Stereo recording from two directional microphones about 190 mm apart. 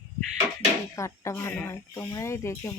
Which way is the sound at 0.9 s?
15° left (ahead or behind).